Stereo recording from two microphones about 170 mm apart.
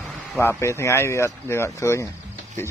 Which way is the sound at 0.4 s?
15° left (ahead or behind).